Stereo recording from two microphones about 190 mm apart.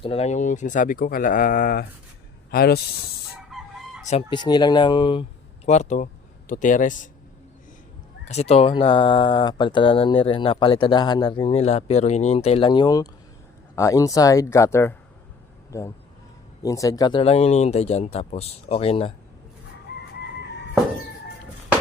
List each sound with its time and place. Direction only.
0.0 s speech: 30° left (ahead or behind); by 2.8 s 55° left (ahead or behind)
3.5 s chicken: centre (ahead or behind)
4.1 s speech: 25° left (ahead or behind)
5.6 s speech: 35° left (ahead or behind)
8.3 s speech: 35° left (ahead or behind)